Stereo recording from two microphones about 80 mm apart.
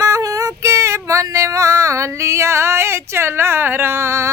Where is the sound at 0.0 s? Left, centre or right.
Right.